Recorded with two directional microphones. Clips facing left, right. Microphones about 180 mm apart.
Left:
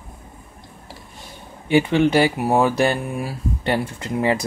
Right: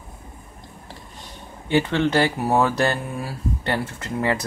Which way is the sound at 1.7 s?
15° left (ahead or behind).